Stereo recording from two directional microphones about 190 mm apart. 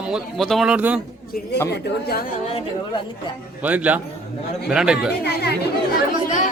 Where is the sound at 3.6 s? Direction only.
10° right (ahead or behind).